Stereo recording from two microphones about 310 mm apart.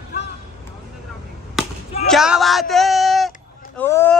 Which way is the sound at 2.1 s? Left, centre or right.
Centre.